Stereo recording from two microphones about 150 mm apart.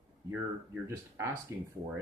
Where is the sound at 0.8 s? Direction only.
20° right (ahead or behind).